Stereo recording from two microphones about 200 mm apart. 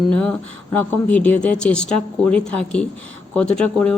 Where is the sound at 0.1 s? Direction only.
5° left (ahead or behind).